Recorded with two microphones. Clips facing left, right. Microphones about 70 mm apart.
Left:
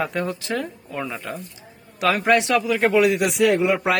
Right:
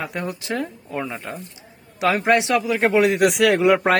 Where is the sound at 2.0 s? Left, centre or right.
Right.